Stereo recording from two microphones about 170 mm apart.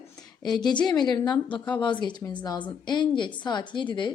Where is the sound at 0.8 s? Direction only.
25° left (ahead or behind).